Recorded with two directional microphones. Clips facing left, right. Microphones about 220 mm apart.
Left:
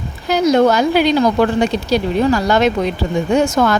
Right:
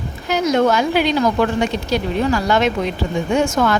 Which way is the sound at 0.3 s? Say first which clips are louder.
Left 4 dB; 35° left (ahead or behind).